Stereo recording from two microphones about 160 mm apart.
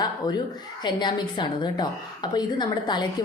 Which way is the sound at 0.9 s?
30° left (ahead or behind).